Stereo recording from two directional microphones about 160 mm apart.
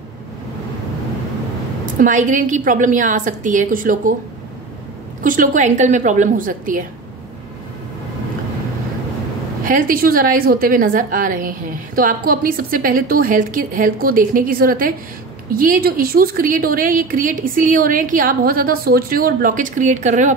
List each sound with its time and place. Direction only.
2.0 s a woman's voice: 50° right (ahead or behind)
5.2 s a woman's voice: 55° right (ahead or behind)
9.7 s a woman's voice: 60° right (ahead or behind)